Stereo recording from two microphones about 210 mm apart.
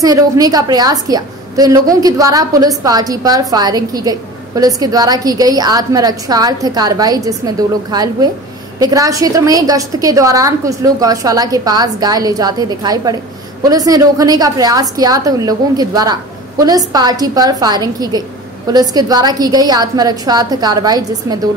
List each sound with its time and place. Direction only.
0.0 s a woman's voice: 15° right (ahead or behind)